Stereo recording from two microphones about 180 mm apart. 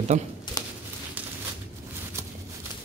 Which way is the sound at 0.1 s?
40° right (ahead or behind).